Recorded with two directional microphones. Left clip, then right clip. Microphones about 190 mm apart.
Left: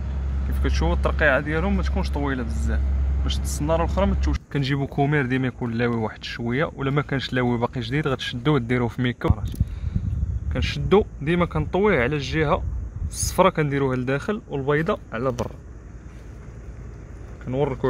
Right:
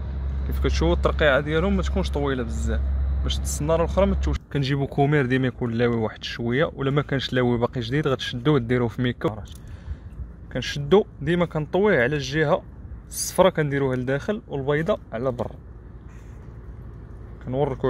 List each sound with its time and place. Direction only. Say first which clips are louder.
0.6 s speech: right 3 dB; 45° right (ahead or behind)
4.5 s speech: even; 15° right (ahead or behind)
10.5 s speech: even; 10° right (ahead or behind)
17.5 s speech: even; 10° right (ahead or behind)